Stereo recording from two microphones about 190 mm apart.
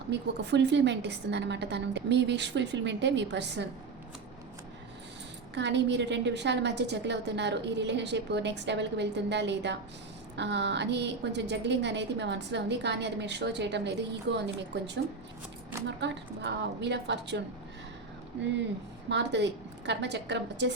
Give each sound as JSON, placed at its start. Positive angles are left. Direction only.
{"t": 0.1, "sound": "a woman's voice", "side_deg": -65}
{"t": 5.5, "sound": "a woman's voice", "side_deg": -65}
{"t": 19.0, "sound": "a woman's voice", "side_deg": -65}